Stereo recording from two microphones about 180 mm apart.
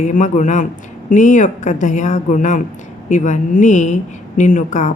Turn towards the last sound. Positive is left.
turn(degrees=45)  # may be behind; listen again after turning